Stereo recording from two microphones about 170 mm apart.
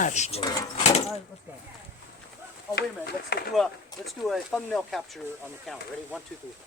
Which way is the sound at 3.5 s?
Centre (ahead or behind).